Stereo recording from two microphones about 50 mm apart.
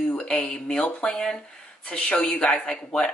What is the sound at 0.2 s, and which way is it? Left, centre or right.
A woman's voice, centre.